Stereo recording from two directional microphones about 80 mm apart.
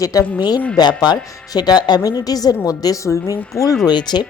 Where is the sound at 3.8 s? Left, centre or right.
Left.